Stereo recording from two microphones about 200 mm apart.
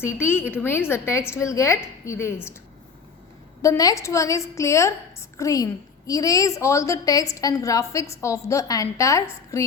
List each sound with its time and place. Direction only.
0.0 s a woman's voice: 10° left (ahead or behind)
3.6 s a woman's voice: 15° left (ahead or behind)